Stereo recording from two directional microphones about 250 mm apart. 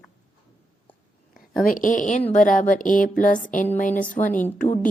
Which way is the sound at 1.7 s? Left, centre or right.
Left.